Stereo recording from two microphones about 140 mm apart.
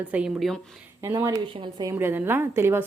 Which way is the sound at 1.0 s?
20° right (ahead or behind).